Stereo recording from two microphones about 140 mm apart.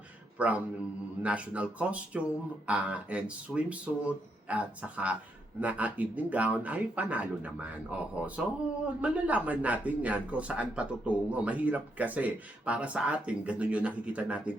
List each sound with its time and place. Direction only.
0.3 s speech: 10° right (ahead or behind)